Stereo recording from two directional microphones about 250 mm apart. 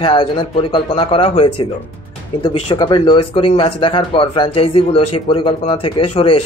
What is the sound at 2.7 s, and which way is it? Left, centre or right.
A man's voice, centre.